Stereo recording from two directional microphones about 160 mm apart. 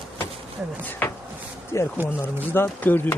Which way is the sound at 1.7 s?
20° left (ahead or behind).